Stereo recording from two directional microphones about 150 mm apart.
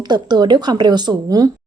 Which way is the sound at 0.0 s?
30° right (ahead or behind).